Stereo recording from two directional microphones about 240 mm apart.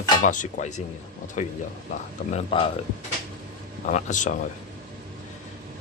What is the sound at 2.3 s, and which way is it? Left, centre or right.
Speech, left.